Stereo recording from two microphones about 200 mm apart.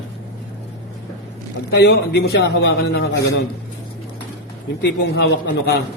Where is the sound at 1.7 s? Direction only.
60° left (ahead or behind).